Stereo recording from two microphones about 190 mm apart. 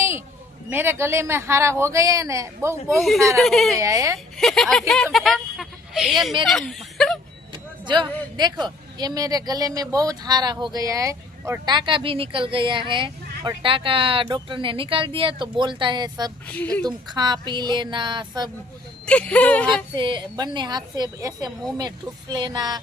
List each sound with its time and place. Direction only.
0.7 s speech: 10° right (ahead or behind)
3.0 s speech: centre (ahead or behind)
3.8 s speech: 15° right (ahead or behind)
4.4 s speech: centre (ahead or behind)
6.5 s snicker: centre (ahead or behind)
7.5 s speech: 25° right (ahead or behind)
16.5 s speech: 5° left (ahead or behind)
16.8 s speech: 20° right (ahead or behind)
19.0 s speech: 5° left (ahead or behind)
20.0 s speech: 25° right (ahead or behind)